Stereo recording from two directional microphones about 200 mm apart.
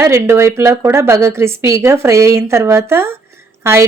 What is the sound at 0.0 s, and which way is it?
A woman's voice, 15° right (ahead or behind).